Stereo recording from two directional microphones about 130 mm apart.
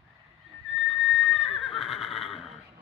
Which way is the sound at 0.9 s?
Centre (ahead or behind).